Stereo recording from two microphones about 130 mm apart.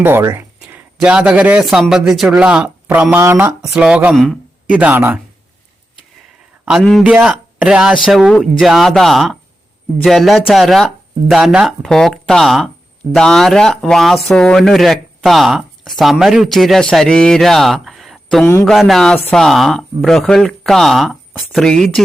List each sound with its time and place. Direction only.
0.0 s a sound: 20° right (ahead or behind)
0.9 s speech: 10° right (ahead or behind)
3.6 s speech: 5° right (ahead or behind)
4.1 s speech: centre (ahead or behind)
4.7 s speech: 10° right (ahead or behind)
7.0 s speech: 5° right (ahead or behind)